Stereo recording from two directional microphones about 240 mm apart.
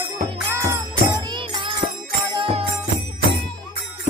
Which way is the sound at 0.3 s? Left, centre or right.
Centre.